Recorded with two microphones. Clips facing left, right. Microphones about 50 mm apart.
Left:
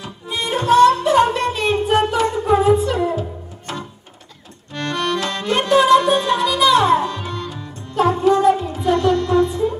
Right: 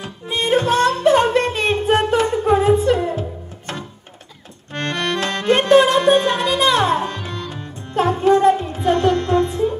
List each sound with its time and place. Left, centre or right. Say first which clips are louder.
0.0 s music: right 3 dB; right